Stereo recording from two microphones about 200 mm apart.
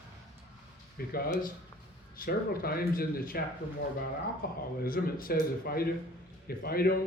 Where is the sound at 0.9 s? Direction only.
45° left (ahead or behind).